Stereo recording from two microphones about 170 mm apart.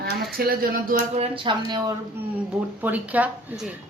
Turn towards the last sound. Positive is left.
turn(degrees=-10)  # may be behind; listen again after turning